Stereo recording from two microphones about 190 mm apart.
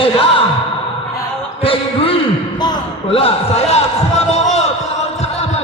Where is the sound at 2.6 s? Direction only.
25° left (ahead or behind).